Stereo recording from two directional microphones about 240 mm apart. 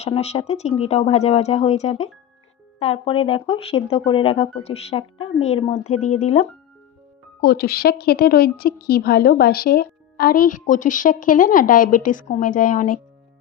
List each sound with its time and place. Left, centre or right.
0.0 s speech: left
7.4 s speech: left